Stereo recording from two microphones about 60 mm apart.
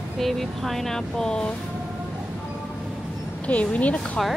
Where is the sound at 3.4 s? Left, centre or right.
Left.